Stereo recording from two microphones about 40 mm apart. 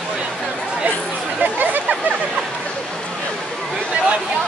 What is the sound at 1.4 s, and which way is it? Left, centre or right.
Chatter, right.